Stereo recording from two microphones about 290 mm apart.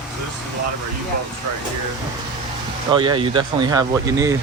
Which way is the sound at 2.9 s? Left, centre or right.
Centre.